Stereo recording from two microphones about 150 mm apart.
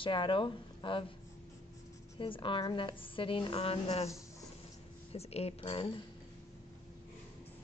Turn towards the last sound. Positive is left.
turn(degrees=35)  # may be behind; listen again after turning